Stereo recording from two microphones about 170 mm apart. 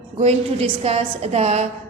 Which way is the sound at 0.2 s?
40° right (ahead or behind).